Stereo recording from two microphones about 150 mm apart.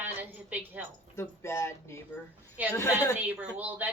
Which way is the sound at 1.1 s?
15° left (ahead or behind).